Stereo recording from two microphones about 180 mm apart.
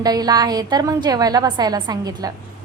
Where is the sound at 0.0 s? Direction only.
20° right (ahead or behind).